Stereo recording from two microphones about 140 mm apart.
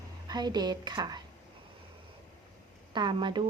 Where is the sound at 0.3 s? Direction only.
30° right (ahead or behind).